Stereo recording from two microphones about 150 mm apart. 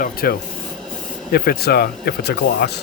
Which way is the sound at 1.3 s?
90° left.